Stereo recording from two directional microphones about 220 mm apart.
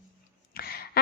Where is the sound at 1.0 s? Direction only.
45° left (ahead or behind).